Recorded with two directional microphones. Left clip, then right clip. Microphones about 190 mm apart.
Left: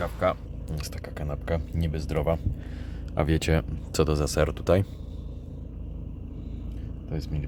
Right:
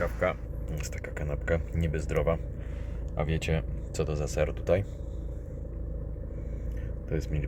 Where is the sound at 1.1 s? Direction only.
10° left (ahead or behind).